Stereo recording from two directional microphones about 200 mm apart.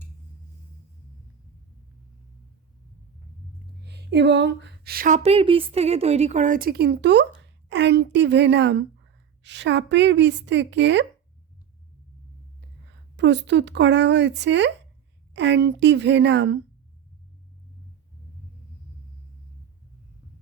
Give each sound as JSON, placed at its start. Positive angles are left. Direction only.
{"t": 3.8, "sound": "a woman's voice", "side_deg": -55}
{"t": 12.9, "sound": "a woman's voice", "side_deg": -60}